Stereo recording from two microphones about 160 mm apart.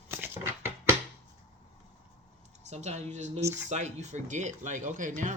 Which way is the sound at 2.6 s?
45° right (ahead or behind).